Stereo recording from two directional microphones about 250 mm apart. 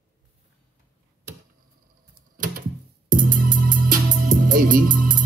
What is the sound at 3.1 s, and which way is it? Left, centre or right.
Music, right.